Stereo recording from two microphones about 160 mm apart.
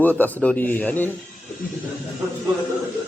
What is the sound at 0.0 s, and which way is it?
Speech, 10° left (ahead or behind).